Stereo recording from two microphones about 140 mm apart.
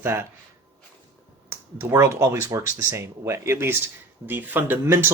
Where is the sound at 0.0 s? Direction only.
15° right (ahead or behind).